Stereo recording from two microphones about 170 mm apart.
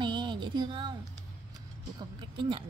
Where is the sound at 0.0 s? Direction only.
25° right (ahead or behind).